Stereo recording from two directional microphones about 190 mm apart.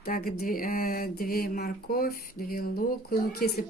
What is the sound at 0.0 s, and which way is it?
Speech, 50° left (ahead or behind).